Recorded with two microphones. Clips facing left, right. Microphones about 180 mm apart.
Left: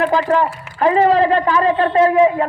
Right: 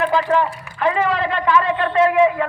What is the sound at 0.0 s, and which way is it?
A man's voice, 40° left (ahead or behind).